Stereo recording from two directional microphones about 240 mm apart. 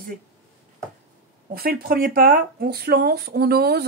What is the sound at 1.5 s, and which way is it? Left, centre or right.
Speech, right.